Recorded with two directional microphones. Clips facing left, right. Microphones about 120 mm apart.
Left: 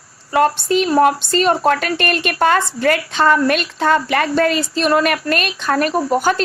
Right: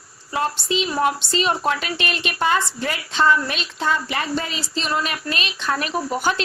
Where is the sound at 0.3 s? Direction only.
60° left (ahead or behind).